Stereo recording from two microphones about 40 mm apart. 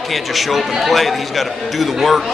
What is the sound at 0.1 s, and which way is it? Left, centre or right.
A man's voice, centre.